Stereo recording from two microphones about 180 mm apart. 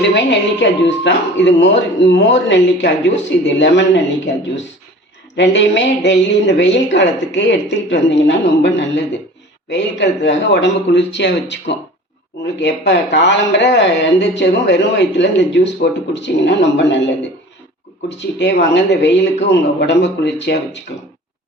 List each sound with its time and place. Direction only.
0.1 s speech: 80° left
5.4 s speech: 80° left
18.2 s speech: 75° left (ahead or behind)